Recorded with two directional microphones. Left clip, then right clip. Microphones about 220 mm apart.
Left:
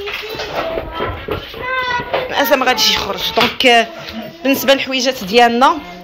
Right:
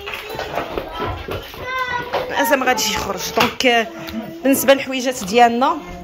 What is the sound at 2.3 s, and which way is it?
Speech, 15° right (ahead or behind).